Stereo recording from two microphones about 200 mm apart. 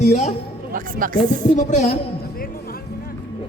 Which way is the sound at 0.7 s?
45° right (ahead or behind).